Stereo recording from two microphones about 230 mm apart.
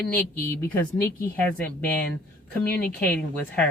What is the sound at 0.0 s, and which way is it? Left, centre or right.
Speech, centre.